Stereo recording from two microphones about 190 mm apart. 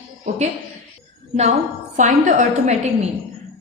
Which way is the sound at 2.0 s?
40° right (ahead or behind).